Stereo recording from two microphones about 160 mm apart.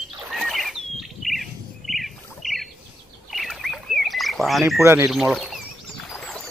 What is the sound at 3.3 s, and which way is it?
Bird, centre (ahead or behind).